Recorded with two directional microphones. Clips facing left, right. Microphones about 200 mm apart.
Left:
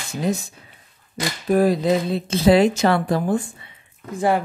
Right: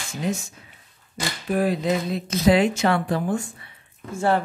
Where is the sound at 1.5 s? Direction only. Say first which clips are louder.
Left 5 dB; 40° left (ahead or behind).